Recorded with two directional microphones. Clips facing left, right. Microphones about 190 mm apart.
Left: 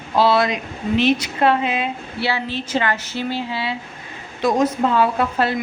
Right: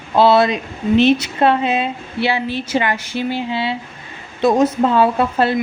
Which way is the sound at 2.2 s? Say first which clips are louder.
Right 4 dB; 15° right (ahead or behind).